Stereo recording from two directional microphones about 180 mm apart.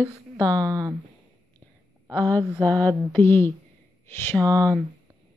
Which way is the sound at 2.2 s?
10° left (ahead or behind).